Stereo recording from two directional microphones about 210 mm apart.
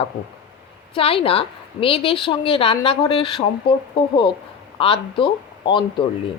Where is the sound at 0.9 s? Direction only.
25° left (ahead or behind).